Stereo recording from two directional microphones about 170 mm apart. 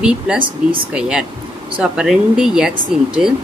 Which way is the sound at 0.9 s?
5° right (ahead or behind).